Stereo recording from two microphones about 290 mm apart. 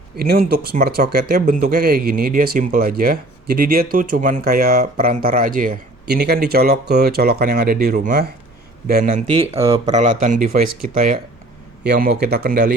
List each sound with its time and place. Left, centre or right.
0.2 s speech: right